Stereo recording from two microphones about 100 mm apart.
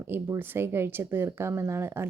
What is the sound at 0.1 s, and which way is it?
A woman's voice, 20° right (ahead or behind).